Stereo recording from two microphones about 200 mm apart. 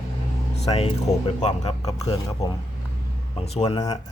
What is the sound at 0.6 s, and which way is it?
Speech, 30° left (ahead or behind).